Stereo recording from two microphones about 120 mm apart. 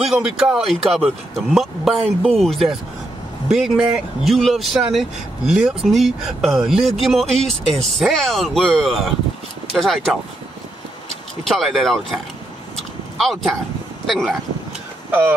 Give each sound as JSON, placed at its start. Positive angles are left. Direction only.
{"t": 0.1, "sound": "speech", "side_deg": -5}
{"t": 11.4, "sound": "speech", "side_deg": 0}
{"t": 13.2, "sound": "speech", "side_deg": 0}
{"t": 15.0, "sound": "speech", "side_deg": -15}